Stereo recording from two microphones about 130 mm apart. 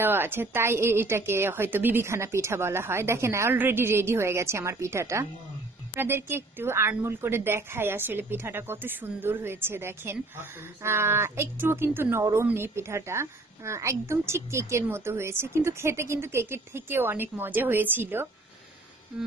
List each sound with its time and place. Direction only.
0.0 s a woman's voice: 15° right (ahead or behind)